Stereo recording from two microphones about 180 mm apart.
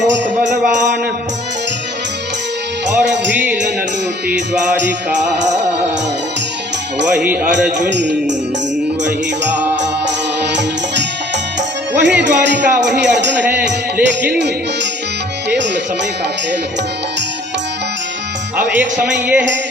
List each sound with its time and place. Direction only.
3.0 s music: 75° right (ahead or behind)
3.3 s music: 10° right (ahead or behind)
7.2 s speech: 5° right (ahead or behind)
7.8 s music: 75° right (ahead or behind)
10.4 s music: 75° right (ahead or behind)
13.9 s speech: 10° right (ahead or behind)
15.4 s music: 75° right (ahead or behind)
18.5 s speech: 10° right (ahead or behind)